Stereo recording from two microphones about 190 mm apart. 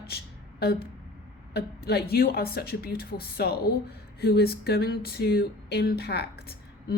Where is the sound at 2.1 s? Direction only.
55° left (ahead or behind).